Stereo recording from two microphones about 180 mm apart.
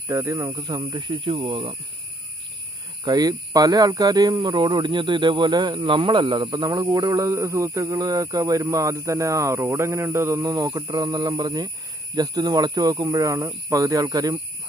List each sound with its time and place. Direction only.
0.1 s speech: 15° right (ahead or behind)
3.0 s speech: 20° right (ahead or behind)